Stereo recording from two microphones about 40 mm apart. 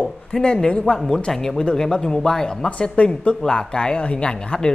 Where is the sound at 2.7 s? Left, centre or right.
Left.